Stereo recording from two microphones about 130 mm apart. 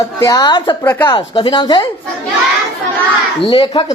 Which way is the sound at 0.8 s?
15° left (ahead or behind).